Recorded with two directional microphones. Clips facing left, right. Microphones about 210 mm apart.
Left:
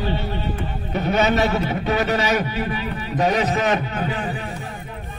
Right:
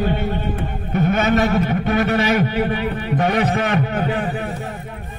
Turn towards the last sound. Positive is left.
turn(degrees=-55)  # may be behind; listen again after turning